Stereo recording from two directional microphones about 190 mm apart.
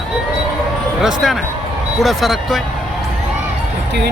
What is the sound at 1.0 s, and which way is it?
Speech, centre (ahead or behind).